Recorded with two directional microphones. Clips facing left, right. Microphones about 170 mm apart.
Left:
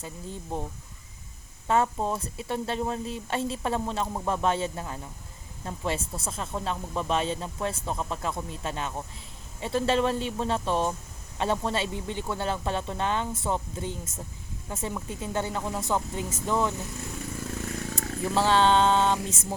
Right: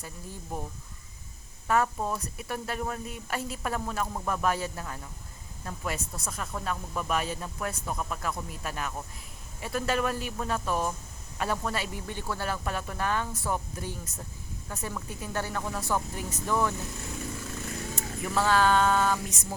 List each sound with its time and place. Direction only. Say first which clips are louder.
0.0 s speech: left 4 dB; 25° left (ahead or behind)
1.6 s speech: left 2 dB; 25° left (ahead or behind)
17.9 s speech: left 3 dB; 30° left (ahead or behind)